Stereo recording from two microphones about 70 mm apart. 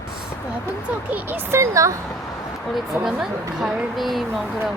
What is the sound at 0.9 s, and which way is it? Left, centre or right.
Speech, right.